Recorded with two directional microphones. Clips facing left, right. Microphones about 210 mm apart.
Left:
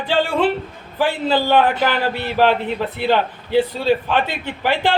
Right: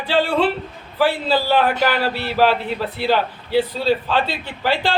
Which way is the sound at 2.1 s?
20° left (ahead or behind).